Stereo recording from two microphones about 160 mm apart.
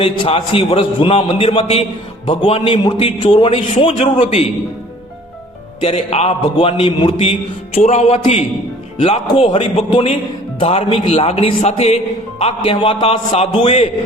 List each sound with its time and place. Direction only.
0.0 s a man's voice: 35° left (ahead or behind)
5.8 s a man's voice: 40° left (ahead or behind)